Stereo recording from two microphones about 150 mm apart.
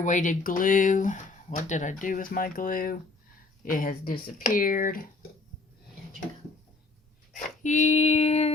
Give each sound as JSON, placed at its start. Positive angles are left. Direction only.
{"t": 0.0, "sound": "speech", "side_deg": 60}
{"t": 7.3, "sound": "female singing", "side_deg": 55}